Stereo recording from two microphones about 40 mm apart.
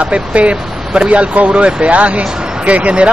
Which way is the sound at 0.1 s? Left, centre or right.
Right.